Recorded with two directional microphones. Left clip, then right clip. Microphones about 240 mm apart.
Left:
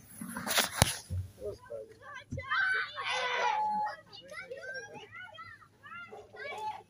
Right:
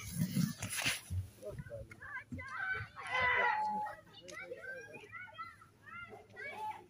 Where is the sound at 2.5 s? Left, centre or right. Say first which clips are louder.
Left 10 dB; left.